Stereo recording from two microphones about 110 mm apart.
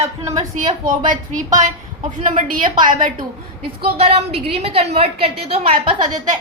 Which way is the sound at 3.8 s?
65° right (ahead or behind).